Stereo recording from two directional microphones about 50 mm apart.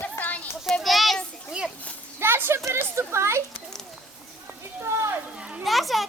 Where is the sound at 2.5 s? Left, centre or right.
Right.